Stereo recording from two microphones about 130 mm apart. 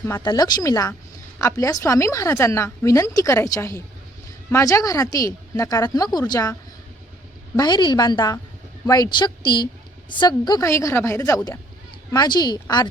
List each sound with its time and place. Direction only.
0.2 s a woman's voice: 30° left (ahead or behind)
7.5 s a woman's voice: 30° left (ahead or behind)
10.6 s a woman's voice: 20° left (ahead or behind)